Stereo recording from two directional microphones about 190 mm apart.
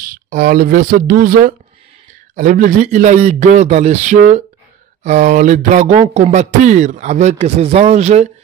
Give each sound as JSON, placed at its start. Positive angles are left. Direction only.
{"t": 0.0, "sound": "speech", "side_deg": -45}